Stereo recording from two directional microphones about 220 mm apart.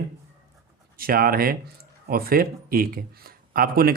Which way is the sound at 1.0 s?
40° right (ahead or behind).